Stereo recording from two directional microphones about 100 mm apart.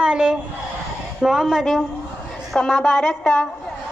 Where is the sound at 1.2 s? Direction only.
Centre (ahead or behind).